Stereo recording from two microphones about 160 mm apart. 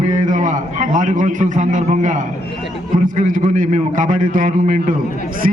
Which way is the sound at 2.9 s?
55° right (ahead or behind).